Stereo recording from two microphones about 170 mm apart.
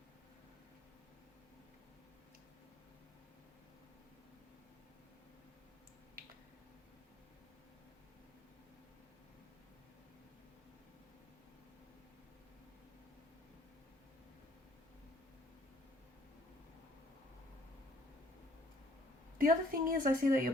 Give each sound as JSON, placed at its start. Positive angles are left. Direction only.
{"t": 19.4, "sound": "a woman's voice", "side_deg": -55}